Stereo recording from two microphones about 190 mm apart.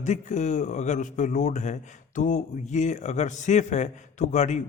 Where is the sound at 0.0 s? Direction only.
40° left (ahead or behind).